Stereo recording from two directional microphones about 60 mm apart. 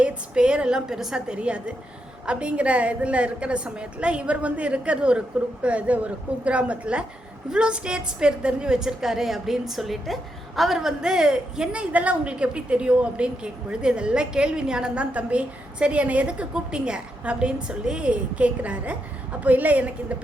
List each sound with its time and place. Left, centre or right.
0.0 s a woman's voice: centre